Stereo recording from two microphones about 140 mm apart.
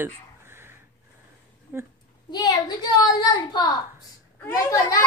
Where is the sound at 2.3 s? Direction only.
30° left (ahead or behind).